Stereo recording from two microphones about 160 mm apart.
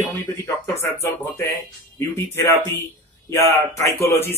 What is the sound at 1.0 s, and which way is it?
Speech, 15° left (ahead or behind).